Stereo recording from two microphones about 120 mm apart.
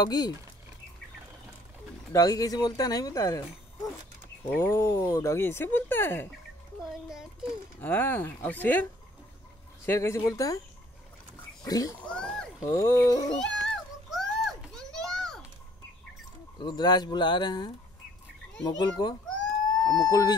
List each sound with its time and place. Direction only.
0.0 s speech: 35° left (ahead or behind)
2.1 s speech: 30° left (ahead or behind)
4.5 s speech: 20° left (ahead or behind)
6.9 s a sound: 5° right (ahead or behind)
7.8 s speech: 15° left (ahead or behind)
9.8 s speech: 25° left (ahead or behind)
11.6 s speech: 30° left (ahead or behind)
12.0 s cat: 10° left (ahead or behind)
12.6 s speech: 25° left (ahead or behind)
13.4 s children playing: 5° left (ahead or behind)
16.5 s speech: 35° left (ahead or behind)